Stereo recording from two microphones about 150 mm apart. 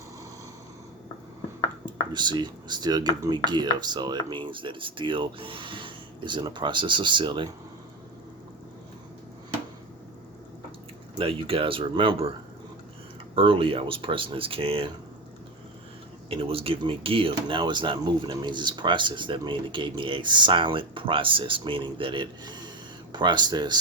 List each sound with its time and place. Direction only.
1.8 s speech: 30° right (ahead or behind)
11.2 s speech: 40° right (ahead or behind)
13.3 s speech: 35° right (ahead or behind)
16.3 s speech: 40° right (ahead or behind)